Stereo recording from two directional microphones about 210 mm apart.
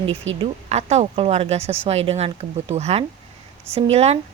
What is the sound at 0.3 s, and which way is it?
A woman's voice, 30° right (ahead or behind).